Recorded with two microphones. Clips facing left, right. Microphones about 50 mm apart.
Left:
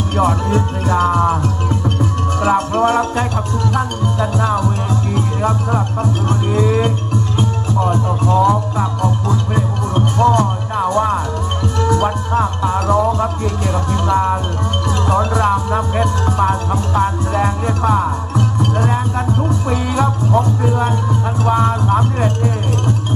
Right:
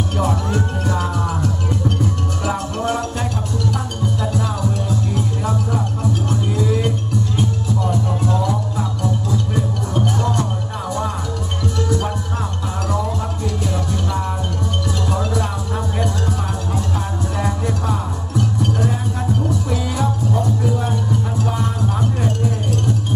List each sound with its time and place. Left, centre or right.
0.2 s music: left
2.5 s music: left